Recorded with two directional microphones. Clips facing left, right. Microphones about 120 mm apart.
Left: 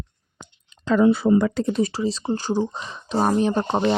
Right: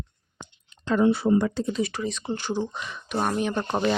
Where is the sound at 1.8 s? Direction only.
30° left (ahead or behind).